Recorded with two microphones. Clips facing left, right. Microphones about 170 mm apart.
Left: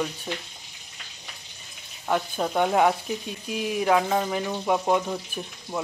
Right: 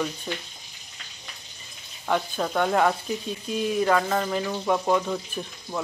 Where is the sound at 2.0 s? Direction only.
5° left (ahead or behind).